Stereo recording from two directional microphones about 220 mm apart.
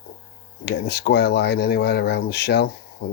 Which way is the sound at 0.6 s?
50° left (ahead or behind).